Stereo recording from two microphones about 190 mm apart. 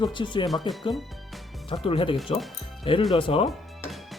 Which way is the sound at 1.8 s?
30° left (ahead or behind).